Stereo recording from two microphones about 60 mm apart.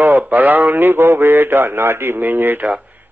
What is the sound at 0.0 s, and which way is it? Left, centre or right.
A man's voice, right.